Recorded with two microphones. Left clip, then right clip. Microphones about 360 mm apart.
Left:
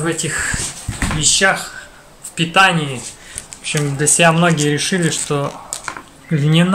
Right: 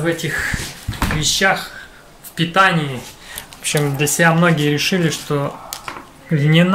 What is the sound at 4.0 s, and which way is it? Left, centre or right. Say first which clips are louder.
Speech: left 3 dB; centre.